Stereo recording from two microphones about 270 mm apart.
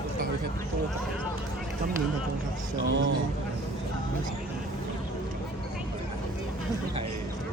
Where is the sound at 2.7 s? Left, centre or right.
Right.